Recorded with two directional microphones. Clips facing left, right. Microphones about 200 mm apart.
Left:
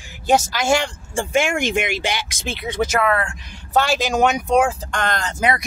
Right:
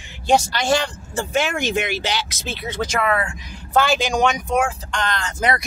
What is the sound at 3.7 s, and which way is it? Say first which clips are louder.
Speech: even; centre (ahead or behind).